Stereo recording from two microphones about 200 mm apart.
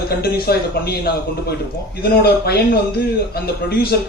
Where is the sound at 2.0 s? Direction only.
50° left (ahead or behind).